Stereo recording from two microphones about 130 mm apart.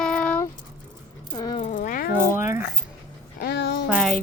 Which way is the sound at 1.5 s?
70° left (ahead or behind).